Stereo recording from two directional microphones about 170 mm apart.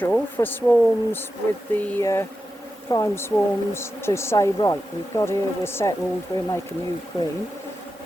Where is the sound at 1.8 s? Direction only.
15° left (ahead or behind).